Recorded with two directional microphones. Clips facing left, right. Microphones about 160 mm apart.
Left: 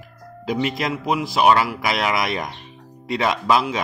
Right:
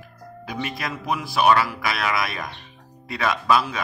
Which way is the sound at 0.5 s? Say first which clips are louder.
Left 7 dB; 20° left (ahead or behind).